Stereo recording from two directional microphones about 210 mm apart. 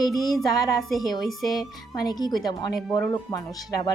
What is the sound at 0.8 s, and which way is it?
Speech, centre (ahead or behind).